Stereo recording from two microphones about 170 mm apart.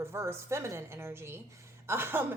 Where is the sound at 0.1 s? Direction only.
15° right (ahead or behind).